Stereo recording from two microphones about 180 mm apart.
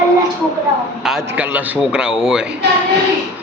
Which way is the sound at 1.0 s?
Centre (ahead or behind).